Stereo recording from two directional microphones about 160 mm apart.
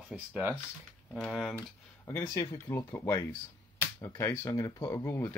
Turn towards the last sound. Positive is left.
turn(degrees=15)  # may be behind; listen again after turning